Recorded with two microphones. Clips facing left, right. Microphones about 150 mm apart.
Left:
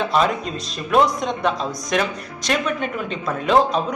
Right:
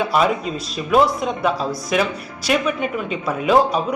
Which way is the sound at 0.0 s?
10° right (ahead or behind).